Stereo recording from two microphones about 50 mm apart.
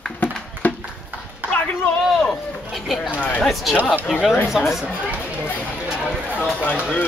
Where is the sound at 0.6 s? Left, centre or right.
Left.